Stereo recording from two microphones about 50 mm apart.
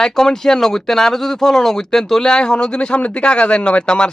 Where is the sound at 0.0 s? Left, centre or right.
Centre.